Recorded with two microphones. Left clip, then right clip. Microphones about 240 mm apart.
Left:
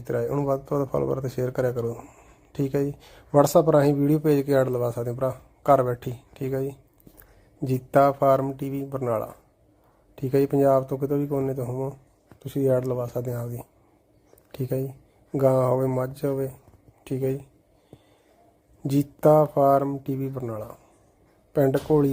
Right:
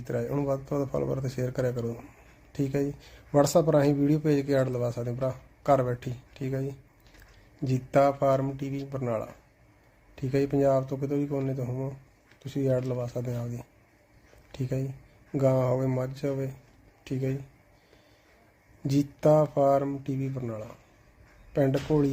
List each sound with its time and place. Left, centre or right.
0.2 s speech: centre
1.2 s speech: centre
18.8 s speech: centre